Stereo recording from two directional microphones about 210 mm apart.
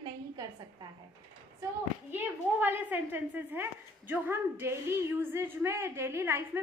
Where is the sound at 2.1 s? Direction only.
10° right (ahead or behind).